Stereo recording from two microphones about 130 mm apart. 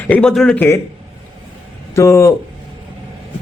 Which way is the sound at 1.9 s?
20° left (ahead or behind).